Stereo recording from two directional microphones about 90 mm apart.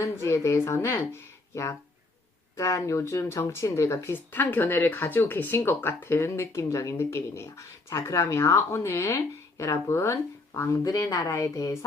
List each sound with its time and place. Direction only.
0.0 s speech: 35° left (ahead or behind)